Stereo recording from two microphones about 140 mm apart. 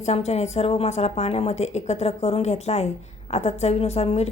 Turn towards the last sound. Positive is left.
turn(degrees=45)  # may be behind; listen again after turning